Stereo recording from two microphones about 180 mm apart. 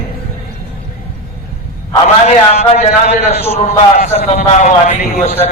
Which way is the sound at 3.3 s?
35° left (ahead or behind).